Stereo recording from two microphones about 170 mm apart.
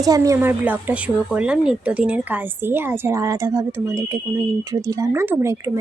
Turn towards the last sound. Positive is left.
turn(degrees=-15)  # may be behind; listen again after turning